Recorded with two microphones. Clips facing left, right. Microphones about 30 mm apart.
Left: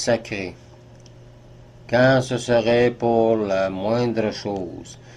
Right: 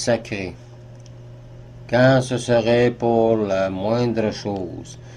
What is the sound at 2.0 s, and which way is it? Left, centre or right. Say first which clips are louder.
Speech: right 1 dB; centre.